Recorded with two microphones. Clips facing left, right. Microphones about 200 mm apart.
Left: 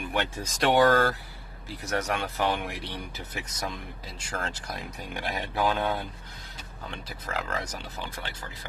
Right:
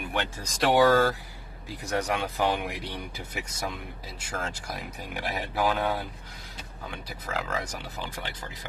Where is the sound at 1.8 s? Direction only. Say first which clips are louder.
Right 1 dB; 15° right (ahead or behind).